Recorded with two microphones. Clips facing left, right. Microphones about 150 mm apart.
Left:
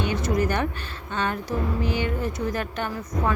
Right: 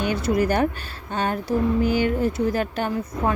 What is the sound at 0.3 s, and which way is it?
Speech, 35° right (ahead or behind).